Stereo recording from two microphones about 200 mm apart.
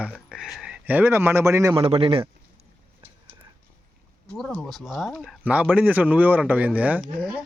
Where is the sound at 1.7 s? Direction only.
25° right (ahead or behind).